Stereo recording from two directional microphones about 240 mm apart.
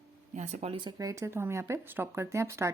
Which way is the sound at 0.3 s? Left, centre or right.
Right.